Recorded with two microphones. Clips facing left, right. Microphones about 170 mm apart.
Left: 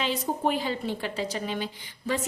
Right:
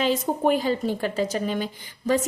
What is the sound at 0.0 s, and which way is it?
A woman's voice, 45° right (ahead or behind).